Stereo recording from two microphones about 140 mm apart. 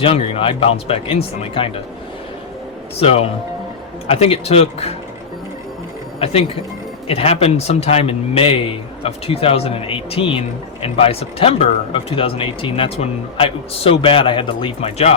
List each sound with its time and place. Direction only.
0.0 s speech: 40° left (ahead or behind)
3.0 s speech: 45° left (ahead or behind)
6.1 s speech: 45° left (ahead or behind)